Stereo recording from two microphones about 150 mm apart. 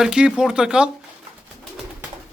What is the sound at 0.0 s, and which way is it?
Speech, 5° right (ahead or behind).